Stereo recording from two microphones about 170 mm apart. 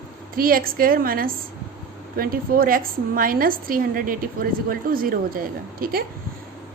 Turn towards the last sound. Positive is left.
turn(degrees=-60)  # may be behind; listen again after turning